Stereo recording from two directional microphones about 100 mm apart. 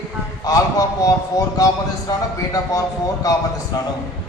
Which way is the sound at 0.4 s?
35° left (ahead or behind).